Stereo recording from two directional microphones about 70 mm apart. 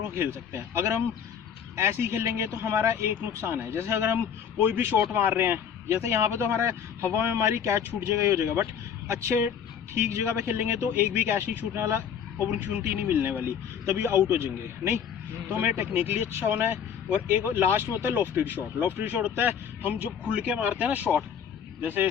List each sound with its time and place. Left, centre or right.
0.2 s speech: right
1.7 s speech: right